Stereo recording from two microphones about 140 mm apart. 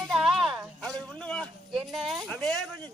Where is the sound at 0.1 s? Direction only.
Centre (ahead or behind).